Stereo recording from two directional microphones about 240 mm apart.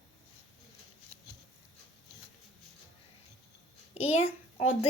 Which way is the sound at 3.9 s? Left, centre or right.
Left.